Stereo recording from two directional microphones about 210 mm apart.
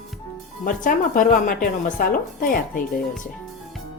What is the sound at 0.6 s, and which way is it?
A woman's voice, 40° left (ahead or behind).